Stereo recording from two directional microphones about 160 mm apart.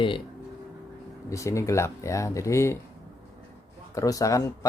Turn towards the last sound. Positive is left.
turn(degrees=20)  # may be behind; listen again after turning